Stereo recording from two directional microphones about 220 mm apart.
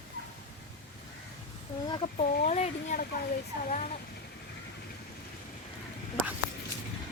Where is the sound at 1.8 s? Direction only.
25° left (ahead or behind).